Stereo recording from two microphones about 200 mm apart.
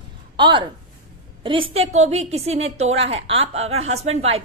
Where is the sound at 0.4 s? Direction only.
25° right (ahead or behind).